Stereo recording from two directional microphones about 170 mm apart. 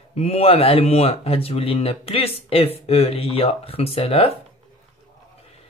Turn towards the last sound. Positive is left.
turn(degrees=35)  # may be behind; listen again after turning